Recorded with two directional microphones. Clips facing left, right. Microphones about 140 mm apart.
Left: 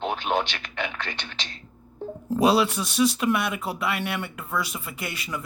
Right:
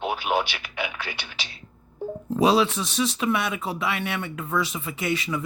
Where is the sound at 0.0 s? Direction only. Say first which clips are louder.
Right 1 dB; 10° right (ahead or behind).